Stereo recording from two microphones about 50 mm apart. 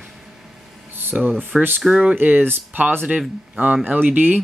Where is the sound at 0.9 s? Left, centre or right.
Right.